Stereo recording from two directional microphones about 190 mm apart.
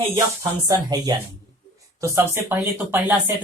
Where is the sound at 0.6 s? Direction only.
20° right (ahead or behind).